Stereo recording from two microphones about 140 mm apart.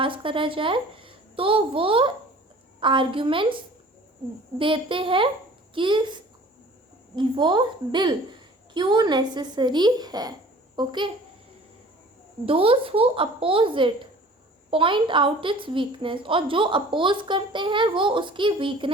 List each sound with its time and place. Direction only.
0.0 s a woman's voice: 40° right (ahead or behind)
7.2 s a woman's voice: 35° right (ahead or behind)
12.5 s a woman's voice: 40° right (ahead or behind)